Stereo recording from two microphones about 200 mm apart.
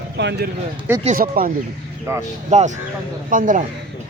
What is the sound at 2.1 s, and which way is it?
Speech, 15° right (ahead or behind).